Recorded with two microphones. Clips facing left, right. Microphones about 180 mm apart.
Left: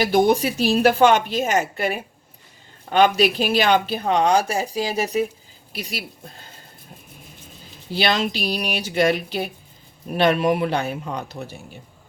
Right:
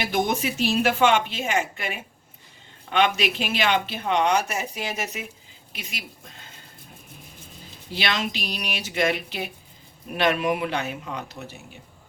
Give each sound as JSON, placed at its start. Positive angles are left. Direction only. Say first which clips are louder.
{"t": 0.0, "sound": "speech", "louder": "left 7 dB", "side_deg": 35}
{"t": 7.9, "sound": "speech", "louder": "left 6 dB", "side_deg": 35}